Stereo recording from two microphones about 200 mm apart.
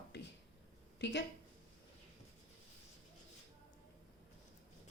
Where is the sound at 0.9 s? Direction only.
60° left (ahead or behind).